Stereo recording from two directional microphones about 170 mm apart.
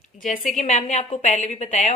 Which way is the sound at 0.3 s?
45° left (ahead or behind).